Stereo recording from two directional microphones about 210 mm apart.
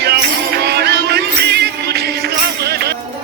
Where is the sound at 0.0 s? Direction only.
50° right (ahead or behind).